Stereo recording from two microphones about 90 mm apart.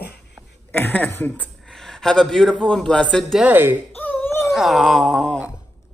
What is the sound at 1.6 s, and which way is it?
A man's voice, 5° left (ahead or behind).